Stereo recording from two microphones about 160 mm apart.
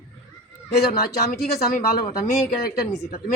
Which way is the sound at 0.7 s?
80° left.